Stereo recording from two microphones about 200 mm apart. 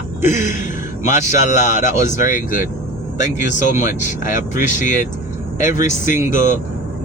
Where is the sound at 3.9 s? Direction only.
40° left (ahead or behind).